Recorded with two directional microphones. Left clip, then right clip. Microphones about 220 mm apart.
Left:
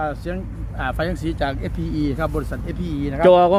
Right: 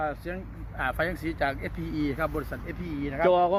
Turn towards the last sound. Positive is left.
turn(degrees=15)  # may be behind; listen again after turning